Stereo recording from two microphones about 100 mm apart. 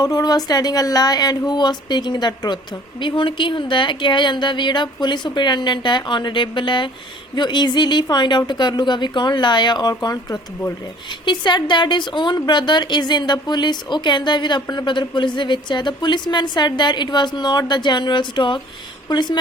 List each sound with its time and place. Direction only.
0.0 s a woman's voice: 40° left (ahead or behind)
11.3 s a woman's voice: 50° left (ahead or behind)